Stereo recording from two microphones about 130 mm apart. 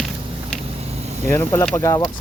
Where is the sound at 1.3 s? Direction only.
20° left (ahead or behind).